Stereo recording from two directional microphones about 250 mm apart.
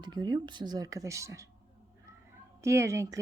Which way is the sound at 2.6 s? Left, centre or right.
Centre.